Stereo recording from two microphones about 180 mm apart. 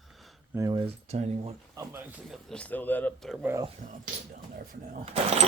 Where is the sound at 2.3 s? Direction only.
5° left (ahead or behind).